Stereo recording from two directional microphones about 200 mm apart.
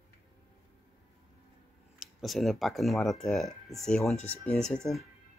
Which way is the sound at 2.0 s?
Centre (ahead or behind).